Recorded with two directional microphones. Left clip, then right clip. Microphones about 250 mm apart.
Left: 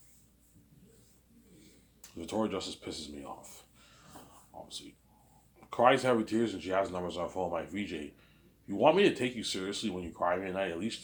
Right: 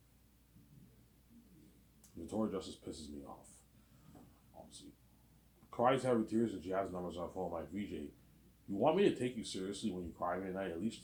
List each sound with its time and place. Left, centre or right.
2.4 s speech: centre
4.5 s a sound: left
5.7 s speech: left